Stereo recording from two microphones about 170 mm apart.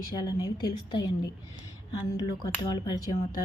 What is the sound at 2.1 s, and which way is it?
Speech, 20° left (ahead or behind).